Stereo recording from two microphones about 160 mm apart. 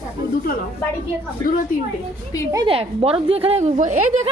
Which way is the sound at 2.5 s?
35° right (ahead or behind).